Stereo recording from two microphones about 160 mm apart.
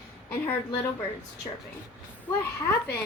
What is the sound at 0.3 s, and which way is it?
Speech, 15° left (ahead or behind).